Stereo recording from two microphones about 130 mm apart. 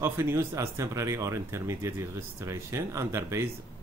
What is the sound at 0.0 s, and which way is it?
Speech, 20° right (ahead or behind).